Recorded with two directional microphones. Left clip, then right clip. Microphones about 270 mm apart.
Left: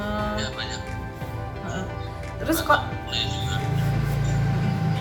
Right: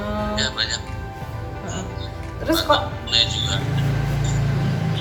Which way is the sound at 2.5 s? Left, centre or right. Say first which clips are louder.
Right 5 dB; centre.